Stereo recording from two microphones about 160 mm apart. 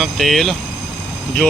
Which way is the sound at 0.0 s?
Centre (ahead or behind).